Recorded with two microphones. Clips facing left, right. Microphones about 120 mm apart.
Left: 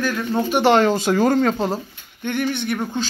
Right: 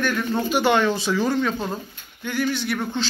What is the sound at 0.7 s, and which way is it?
Speech, 45° left (ahead or behind).